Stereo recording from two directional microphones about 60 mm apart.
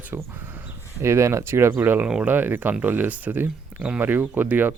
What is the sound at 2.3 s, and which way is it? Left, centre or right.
Speech, right.